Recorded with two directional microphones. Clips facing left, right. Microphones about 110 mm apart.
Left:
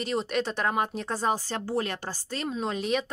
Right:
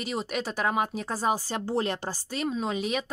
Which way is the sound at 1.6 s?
25° right (ahead or behind).